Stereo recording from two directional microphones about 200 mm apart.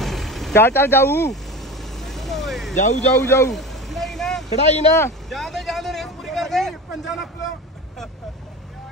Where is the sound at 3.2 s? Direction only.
15° left (ahead or behind).